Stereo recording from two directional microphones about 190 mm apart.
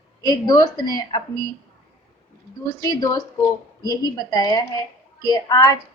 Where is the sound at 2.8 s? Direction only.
20° left (ahead or behind).